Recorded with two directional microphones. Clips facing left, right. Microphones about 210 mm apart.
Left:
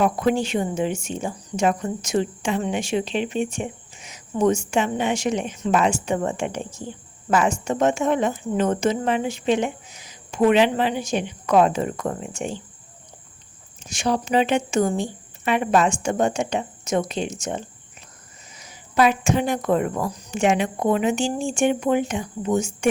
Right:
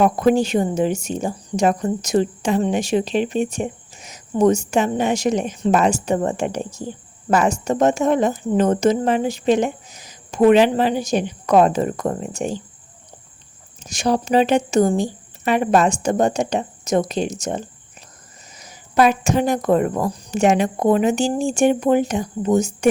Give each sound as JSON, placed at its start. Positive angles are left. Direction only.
{"t": 0.0, "sound": "speech", "side_deg": -40}
{"t": 13.8, "sound": "speech", "side_deg": -40}